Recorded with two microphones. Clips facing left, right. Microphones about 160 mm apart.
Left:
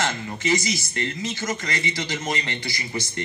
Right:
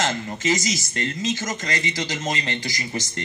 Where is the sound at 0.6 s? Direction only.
90° right.